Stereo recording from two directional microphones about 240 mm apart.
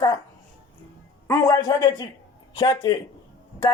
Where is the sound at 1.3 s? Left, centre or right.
Centre.